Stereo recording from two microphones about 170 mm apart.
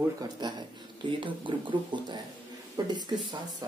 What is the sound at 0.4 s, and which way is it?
Speech, 25° right (ahead or behind).